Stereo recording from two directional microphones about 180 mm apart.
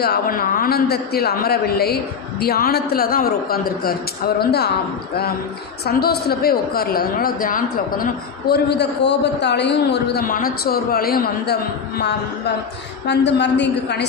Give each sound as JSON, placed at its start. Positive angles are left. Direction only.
{"t": 0.0, "sound": "a woman's voice", "side_deg": 55}
{"t": 5.8, "sound": "a woman's voice", "side_deg": 60}
{"t": 13.1, "sound": "a woman's voice", "side_deg": 75}